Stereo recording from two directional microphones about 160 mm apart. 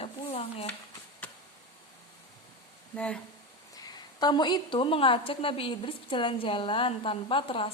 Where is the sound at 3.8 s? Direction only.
25° left (ahead or behind).